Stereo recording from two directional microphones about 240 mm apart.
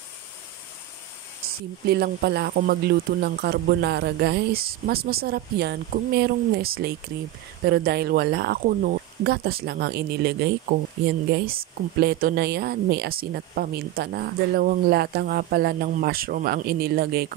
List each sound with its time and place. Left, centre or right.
1.9 s speech: right